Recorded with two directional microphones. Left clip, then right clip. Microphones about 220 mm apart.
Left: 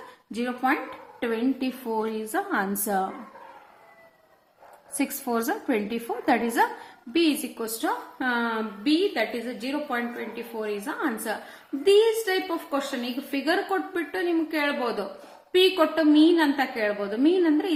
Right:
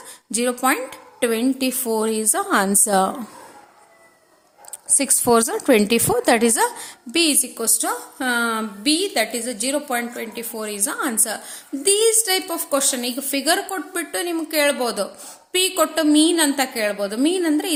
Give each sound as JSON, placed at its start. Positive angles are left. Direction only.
{"t": 0.3, "sound": "a woman's voice", "side_deg": -50}
{"t": 4.9, "sound": "a woman's voice", "side_deg": -55}